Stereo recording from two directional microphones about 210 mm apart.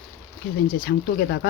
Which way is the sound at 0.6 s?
45° left (ahead or behind).